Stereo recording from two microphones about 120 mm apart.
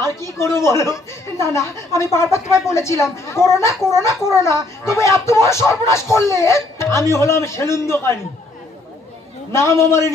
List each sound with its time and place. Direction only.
0.0 s speech: 25° left (ahead or behind)
9.5 s speech: 25° left (ahead or behind)